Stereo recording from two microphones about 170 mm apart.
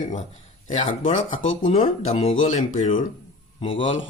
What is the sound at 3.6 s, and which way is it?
Speech, 30° left (ahead or behind).